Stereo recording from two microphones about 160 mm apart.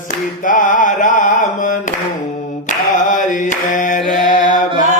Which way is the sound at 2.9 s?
55° left (ahead or behind).